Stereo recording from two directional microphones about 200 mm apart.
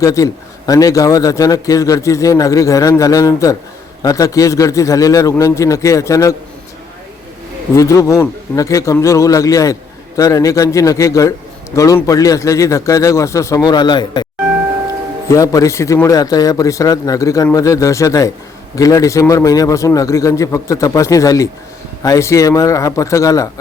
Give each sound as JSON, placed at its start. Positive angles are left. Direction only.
{"t": 0.0, "sound": "a man's voice", "side_deg": 15}
{"t": 7.8, "sound": "a man's voice", "side_deg": 15}
{"t": 15.3, "sound": "a man's voice", "side_deg": 15}